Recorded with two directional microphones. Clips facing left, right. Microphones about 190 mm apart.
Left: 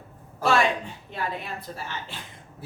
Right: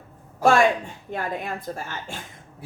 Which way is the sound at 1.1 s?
50° right (ahead or behind).